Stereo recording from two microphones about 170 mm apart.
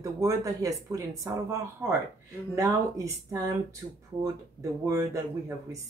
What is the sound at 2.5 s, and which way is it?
Speech, 20° right (ahead or behind).